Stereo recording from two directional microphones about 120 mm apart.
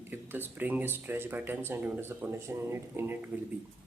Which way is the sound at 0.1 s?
15° right (ahead or behind).